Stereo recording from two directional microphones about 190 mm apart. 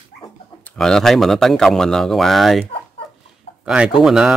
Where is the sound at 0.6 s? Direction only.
5° left (ahead or behind).